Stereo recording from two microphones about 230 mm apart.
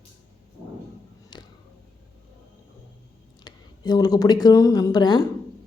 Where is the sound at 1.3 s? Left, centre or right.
Centre.